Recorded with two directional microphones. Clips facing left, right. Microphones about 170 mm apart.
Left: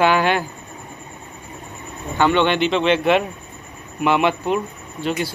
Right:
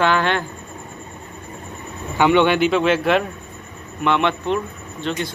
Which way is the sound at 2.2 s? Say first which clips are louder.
Right 2 dB; 10° right (ahead or behind).